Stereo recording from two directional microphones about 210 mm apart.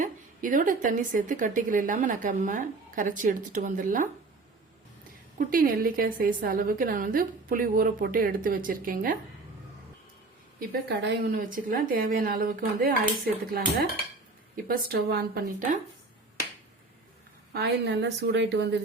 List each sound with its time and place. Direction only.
0.0 s a woman's voice: 40° right (ahead or behind)
5.4 s a woman's voice: 40° right (ahead or behind)
10.6 s a woman's voice: 50° right (ahead or behind)
14.5 s a woman's voice: 45° right (ahead or behind)
17.5 s a woman's voice: 55° right (ahead or behind)